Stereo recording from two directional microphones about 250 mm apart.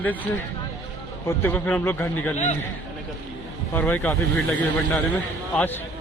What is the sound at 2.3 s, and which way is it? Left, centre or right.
Speech, left.